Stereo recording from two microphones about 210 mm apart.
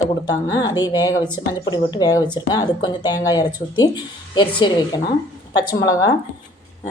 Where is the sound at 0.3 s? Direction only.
20° left (ahead or behind).